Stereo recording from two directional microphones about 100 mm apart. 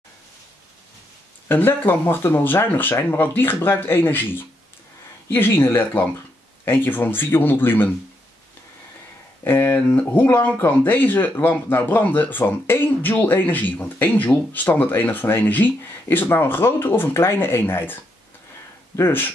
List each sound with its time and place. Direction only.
1.5 s speech: 20° left (ahead or behind)
5.3 s speech: 20° left (ahead or behind)
9.4 s speech: 20° left (ahead or behind)
18.9 s speech: 20° left (ahead or behind)